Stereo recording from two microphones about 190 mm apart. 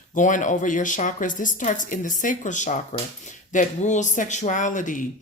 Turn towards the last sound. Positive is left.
turn(degrees=40)  # may be behind; listen again after turning